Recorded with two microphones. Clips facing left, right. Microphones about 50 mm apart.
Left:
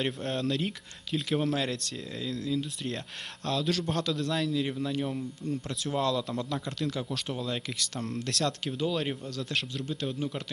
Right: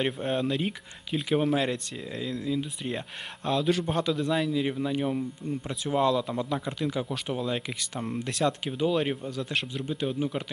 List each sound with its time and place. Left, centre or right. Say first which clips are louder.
0.0 s speech: right 3 dB; centre